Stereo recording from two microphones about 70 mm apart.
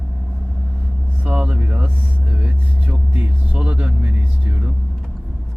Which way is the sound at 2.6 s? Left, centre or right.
Right.